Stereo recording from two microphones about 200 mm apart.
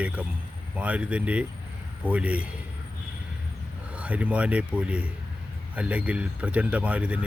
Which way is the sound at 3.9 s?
5° right (ahead or behind).